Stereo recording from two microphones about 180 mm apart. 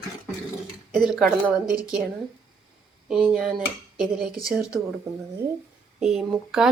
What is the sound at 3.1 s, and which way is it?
Speech, 5° right (ahead or behind).